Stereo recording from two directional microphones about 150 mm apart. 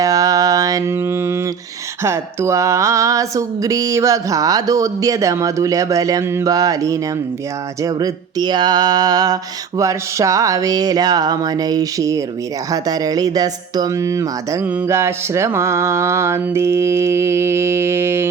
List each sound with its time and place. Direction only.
0.0 s mantra: 25° right (ahead or behind)
2.0 s a sound: 20° right (ahead or behind)
14.7 s mantra: 15° right (ahead or behind)